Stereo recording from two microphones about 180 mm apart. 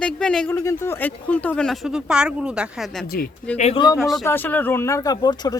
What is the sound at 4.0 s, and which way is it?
Speech, centre (ahead or behind).